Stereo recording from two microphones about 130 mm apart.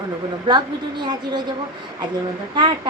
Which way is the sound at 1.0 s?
35° right (ahead or behind).